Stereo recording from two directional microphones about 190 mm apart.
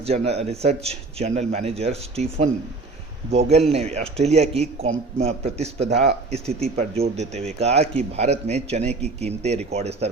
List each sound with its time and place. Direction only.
0.0 s speech: 35° right (ahead or behind)